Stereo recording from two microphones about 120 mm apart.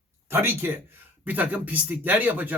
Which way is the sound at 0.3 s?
20° right (ahead or behind).